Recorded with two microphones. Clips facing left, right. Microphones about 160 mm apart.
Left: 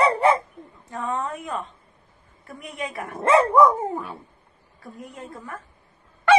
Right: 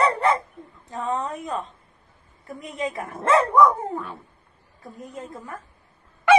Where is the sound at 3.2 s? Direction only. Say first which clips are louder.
Left 1 dB; 5° left (ahead or behind).